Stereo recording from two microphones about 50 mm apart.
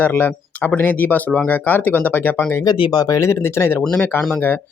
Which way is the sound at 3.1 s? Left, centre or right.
Left.